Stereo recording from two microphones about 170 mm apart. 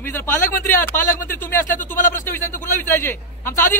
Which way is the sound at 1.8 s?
50° left (ahead or behind).